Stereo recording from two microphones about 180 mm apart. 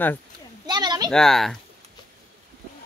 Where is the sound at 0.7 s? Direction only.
25° right (ahead or behind).